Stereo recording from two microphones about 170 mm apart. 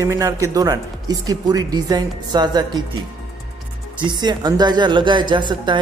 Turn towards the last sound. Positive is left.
turn(degrees=-25)  # may be behind; listen again after turning